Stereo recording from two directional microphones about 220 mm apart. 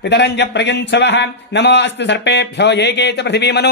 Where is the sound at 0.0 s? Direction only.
50° left (ahead or behind).